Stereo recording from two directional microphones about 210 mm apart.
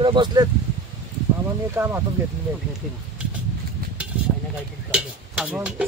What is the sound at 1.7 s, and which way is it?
Speech, 10° right (ahead or behind).